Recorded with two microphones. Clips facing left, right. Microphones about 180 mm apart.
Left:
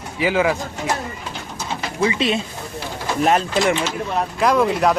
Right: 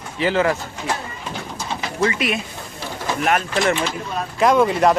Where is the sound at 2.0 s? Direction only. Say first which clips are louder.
Left 2 dB; 20° left (ahead or behind).